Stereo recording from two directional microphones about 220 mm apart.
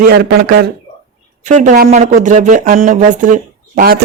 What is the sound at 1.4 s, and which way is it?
Speech, 35° right (ahead or behind).